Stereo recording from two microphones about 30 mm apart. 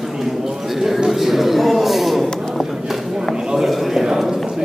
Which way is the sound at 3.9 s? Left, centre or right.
Centre.